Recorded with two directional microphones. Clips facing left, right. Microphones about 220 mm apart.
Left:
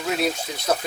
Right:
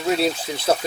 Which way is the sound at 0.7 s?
30° right (ahead or behind).